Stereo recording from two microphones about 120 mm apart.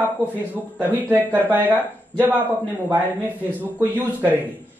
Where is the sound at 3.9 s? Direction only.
15° right (ahead or behind).